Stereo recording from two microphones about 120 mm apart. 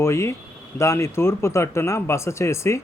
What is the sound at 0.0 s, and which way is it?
Speech, 25° left (ahead or behind).